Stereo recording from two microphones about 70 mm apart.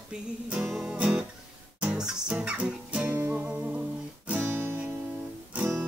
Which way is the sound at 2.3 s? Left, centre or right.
Centre.